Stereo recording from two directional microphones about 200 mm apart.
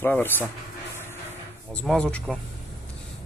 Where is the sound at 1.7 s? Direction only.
5° left (ahead or behind).